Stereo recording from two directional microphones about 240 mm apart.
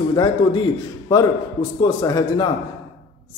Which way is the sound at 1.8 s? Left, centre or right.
Centre.